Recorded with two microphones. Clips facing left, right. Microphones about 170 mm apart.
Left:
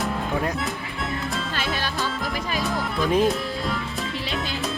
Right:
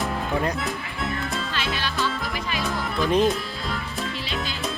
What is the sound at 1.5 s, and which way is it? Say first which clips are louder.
Music: left 1 dB; 45° left (ahead or behind).